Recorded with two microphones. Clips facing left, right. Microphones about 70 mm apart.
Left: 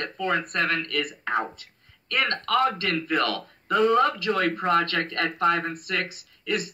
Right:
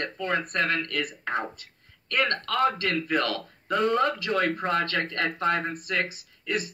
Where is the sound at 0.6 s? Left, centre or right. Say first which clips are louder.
Left 1 dB; right.